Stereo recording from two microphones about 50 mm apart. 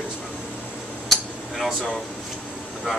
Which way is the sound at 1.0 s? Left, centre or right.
Centre.